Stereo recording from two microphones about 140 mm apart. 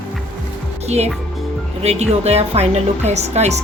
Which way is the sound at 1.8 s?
50° right (ahead or behind).